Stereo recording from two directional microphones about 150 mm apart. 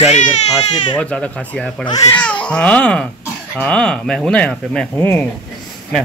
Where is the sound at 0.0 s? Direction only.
50° left (ahead or behind).